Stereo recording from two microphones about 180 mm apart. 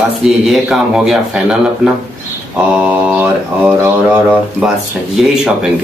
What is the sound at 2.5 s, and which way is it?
Mantra, 10° right (ahead or behind).